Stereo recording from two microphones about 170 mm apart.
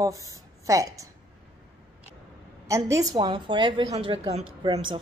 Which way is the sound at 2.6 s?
20° right (ahead or behind).